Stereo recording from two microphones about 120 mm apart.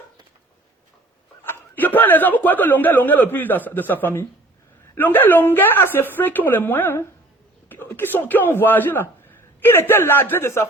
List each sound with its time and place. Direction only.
1.5 s a man's voice: 15° left (ahead or behind)